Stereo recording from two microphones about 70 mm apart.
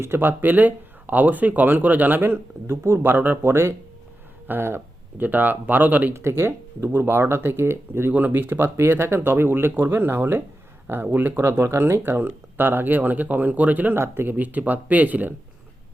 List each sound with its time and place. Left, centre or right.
0.0 s speech: right
3.5 s speech: right
6.1 s speech: right
8.1 s speech: right